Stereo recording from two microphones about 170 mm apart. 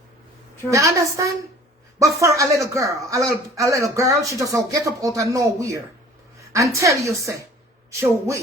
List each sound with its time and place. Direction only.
0.7 s a man's voice: 20° right (ahead or behind)